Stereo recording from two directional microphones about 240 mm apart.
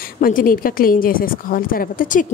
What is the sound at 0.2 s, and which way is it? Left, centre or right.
A woman's voice, left.